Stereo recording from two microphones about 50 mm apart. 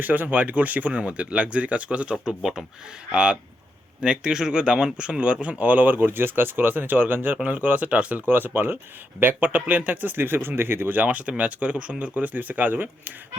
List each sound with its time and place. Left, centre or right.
0.0 s speech: right
2.2 s speech: centre; by 8.2 s right
8.3 s speech: right